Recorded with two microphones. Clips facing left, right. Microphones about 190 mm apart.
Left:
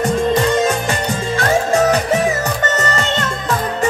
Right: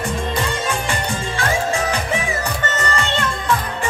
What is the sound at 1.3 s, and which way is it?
Music, 40° left (ahead or behind).